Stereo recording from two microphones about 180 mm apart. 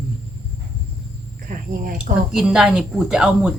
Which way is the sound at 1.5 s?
45° right (ahead or behind).